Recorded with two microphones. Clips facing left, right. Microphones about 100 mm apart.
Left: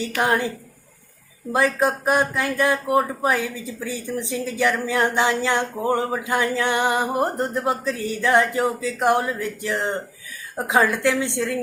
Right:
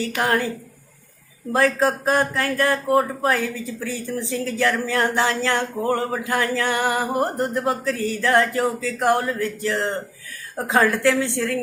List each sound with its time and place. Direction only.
0.2 s a woman's voice: 20° left (ahead or behind)
1.5 s speech: 15° left (ahead or behind)